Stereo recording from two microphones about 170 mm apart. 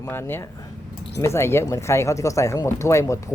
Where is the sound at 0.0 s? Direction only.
15° left (ahead or behind).